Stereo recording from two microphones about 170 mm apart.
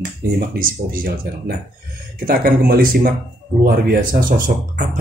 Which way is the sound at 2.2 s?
60° right (ahead or behind).